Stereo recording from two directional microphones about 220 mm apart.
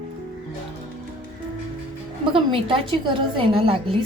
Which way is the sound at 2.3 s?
25° right (ahead or behind).